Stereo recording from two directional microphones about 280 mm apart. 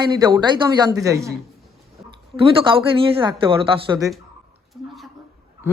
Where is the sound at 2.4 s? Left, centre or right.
Centre.